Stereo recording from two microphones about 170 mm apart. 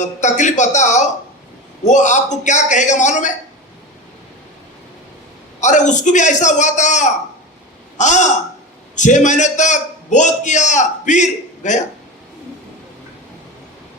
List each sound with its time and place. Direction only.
0.0 s a man's voice: 45° left (ahead or behind)
5.5 s a man's voice: 45° left (ahead or behind)